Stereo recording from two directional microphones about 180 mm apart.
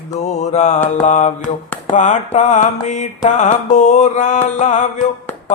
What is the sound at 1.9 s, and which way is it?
Music, 45° left (ahead or behind).